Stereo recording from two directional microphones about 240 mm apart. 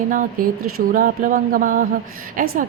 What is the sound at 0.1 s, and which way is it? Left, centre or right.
Speech, right.